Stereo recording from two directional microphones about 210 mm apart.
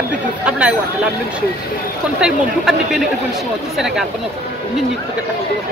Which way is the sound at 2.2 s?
Centre (ahead or behind).